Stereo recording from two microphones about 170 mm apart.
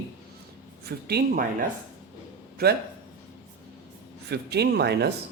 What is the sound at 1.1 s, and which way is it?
Speech, 70° right (ahead or behind).